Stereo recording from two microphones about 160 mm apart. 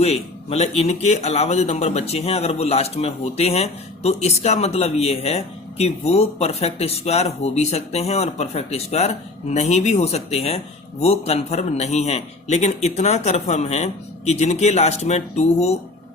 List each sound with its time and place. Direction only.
0.0 s a man's voice: 40° left (ahead or behind)